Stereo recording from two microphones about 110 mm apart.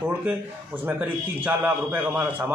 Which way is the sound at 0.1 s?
15° right (ahead or behind).